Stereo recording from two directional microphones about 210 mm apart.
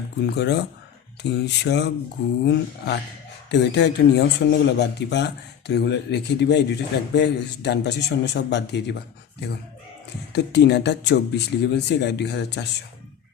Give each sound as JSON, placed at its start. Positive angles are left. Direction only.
{"t": 0.3, "sound": "speech", "side_deg": 55}
{"t": 10.3, "sound": "speech", "side_deg": 55}